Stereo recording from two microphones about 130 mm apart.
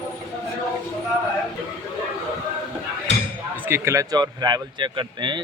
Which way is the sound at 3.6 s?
20° right (ahead or behind).